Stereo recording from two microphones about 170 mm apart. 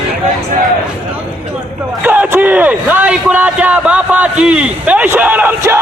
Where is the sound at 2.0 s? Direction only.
10° right (ahead or behind).